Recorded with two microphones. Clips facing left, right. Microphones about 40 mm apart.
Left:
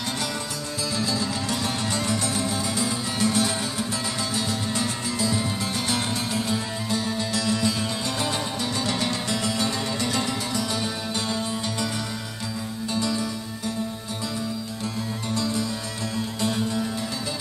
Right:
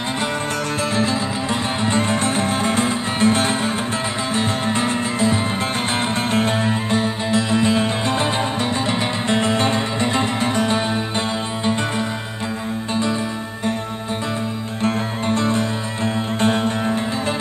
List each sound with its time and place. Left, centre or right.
0.9 s music: right
14.8 s music: right